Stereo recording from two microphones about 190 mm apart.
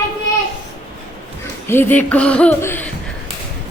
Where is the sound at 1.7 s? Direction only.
10° left (ahead or behind).